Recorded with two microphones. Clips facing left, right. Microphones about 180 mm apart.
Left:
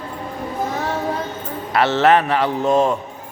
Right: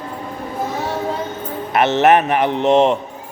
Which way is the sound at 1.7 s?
20° right (ahead or behind).